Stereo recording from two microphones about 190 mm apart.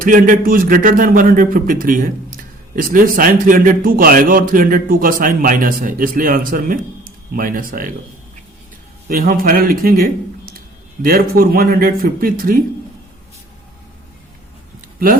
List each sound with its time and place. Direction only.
0.0 s a man's voice: 45° right (ahead or behind)
9.0 s a man's voice: 50° right (ahead or behind)
14.8 s a sound: 50° right (ahead or behind)